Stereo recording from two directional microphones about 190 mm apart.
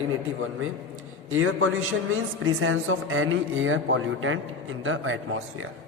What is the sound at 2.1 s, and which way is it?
A man's voice, 90° right.